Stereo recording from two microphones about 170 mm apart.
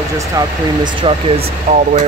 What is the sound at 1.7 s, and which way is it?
Speech, 45° right (ahead or behind).